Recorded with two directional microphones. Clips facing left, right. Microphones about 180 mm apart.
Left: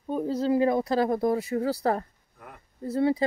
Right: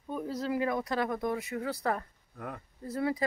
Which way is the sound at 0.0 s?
30° left (ahead or behind).